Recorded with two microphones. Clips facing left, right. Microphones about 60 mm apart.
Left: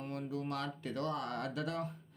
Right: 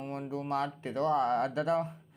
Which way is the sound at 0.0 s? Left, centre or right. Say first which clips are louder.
Right 3 dB; right.